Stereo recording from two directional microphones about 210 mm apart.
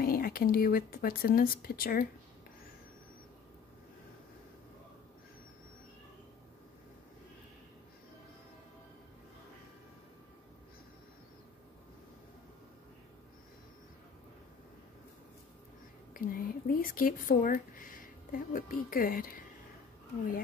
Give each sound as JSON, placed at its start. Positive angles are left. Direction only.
{"t": 0.0, "sound": "speech", "side_deg": 45}
{"t": 16.1, "sound": "speech", "side_deg": 45}